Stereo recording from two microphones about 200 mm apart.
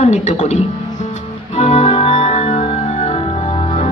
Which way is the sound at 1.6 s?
35° left (ahead or behind).